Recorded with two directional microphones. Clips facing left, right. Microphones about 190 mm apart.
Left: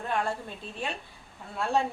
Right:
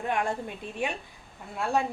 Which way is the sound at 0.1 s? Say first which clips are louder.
Right 1 dB; 15° right (ahead or behind).